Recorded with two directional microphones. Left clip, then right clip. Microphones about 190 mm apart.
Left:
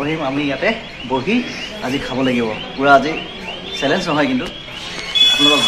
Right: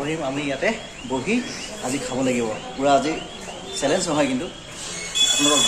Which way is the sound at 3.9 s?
5° right (ahead or behind).